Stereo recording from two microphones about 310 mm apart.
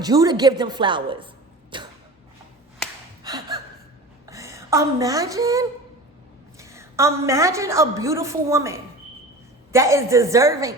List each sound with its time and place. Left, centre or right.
0.0 s a woman's voice: centre
1.7 s a sound: centre
4.3 s a woman's voice: centre